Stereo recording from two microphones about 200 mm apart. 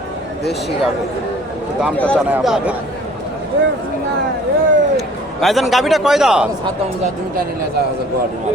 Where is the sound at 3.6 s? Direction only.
60° right (ahead or behind).